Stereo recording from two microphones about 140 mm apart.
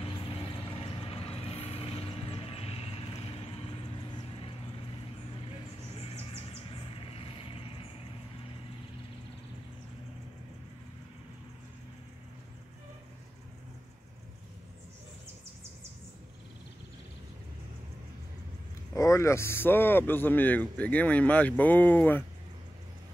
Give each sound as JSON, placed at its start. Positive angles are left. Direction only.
{"t": 0.0, "sound": "vehicle", "side_deg": 40}
{"t": 5.9, "sound": "vehicle", "side_deg": 45}
{"t": 18.9, "sound": "speech", "side_deg": 20}